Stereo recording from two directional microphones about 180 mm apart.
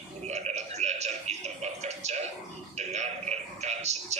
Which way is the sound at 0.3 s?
40° right (ahead or behind).